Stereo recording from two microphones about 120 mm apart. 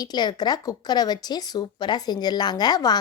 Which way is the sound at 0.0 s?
35° left (ahead or behind).